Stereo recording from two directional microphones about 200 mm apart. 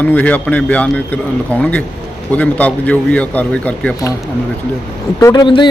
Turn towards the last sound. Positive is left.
turn(degrees=20)  # may be behind; listen again after turning